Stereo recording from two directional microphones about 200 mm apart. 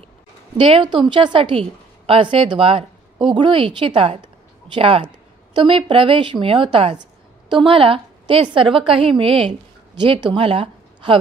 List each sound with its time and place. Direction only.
0.6 s a woman's voice: 25° right (ahead or behind)